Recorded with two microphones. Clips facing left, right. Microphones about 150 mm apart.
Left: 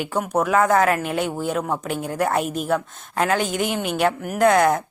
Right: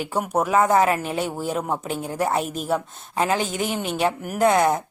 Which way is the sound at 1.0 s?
35° right (ahead or behind).